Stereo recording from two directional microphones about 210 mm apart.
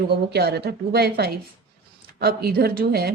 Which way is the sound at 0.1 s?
50° right (ahead or behind).